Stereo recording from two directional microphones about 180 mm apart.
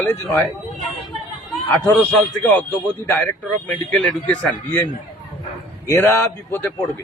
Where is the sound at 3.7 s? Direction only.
5° left (ahead or behind).